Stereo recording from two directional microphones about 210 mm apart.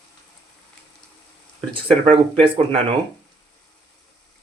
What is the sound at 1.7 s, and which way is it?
Speech, 25° right (ahead or behind).